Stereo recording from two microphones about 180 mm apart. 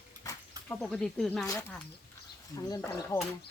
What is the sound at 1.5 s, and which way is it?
Speech, 15° left (ahead or behind).